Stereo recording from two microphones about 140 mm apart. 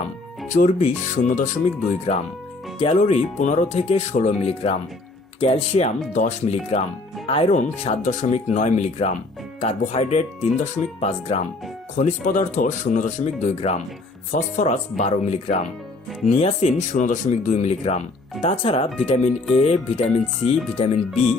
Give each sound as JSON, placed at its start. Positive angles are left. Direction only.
{"t": 0.4, "sound": "speech", "side_deg": 60}